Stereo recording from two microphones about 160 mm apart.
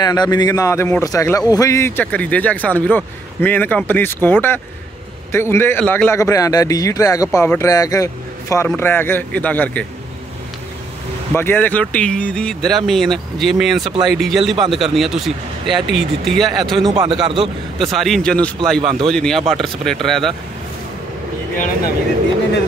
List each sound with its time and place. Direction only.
0.0 s a man's voice: 25° left (ahead or behind); by 9.8 s 10° left (ahead or behind)
11.3 s speech: 15° left (ahead or behind)
16.9 s a man's voice: 25° right (ahead or behind)
17.9 s speech: centre (ahead or behind)
18.8 s speech: 30° right (ahead or behind)
19.0 s speech: 5° left (ahead or behind)